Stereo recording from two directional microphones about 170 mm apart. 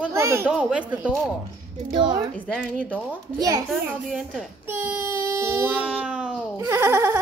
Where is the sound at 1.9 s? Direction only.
25° right (ahead or behind).